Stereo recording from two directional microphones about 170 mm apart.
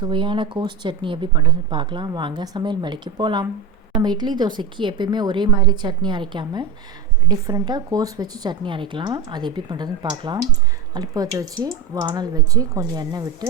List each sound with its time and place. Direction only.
0.0 s speech: 30° right (ahead or behind)